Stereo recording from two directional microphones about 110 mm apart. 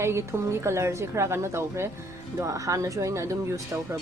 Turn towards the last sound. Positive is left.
turn(degrees=-30)  # may be behind; listen again after turning